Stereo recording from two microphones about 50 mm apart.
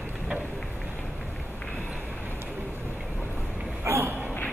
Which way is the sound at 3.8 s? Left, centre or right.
Right.